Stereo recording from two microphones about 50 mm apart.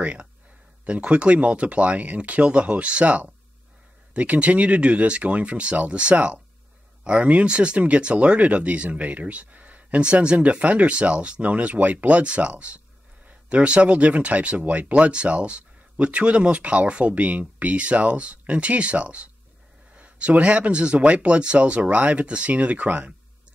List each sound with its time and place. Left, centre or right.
0.0 s speech: right